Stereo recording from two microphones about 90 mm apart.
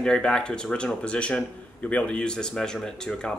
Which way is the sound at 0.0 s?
10° left (ahead or behind).